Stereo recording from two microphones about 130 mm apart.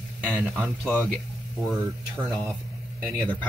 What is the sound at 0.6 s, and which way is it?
Speech, centre (ahead or behind).